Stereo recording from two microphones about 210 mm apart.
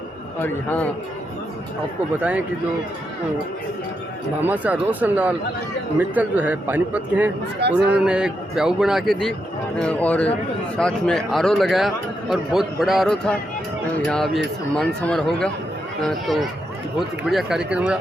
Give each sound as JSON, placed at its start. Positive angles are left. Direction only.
{"t": 0.3, "sound": "a man's voice", "side_deg": 10}
{"t": 4.4, "sound": "a man's voice", "side_deg": -5}
{"t": 7.6, "sound": "speech", "side_deg": -50}
{"t": 8.0, "sound": "a man's voice", "side_deg": -5}